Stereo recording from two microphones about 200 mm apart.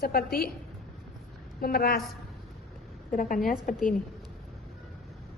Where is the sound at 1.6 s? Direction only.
45° left (ahead or behind).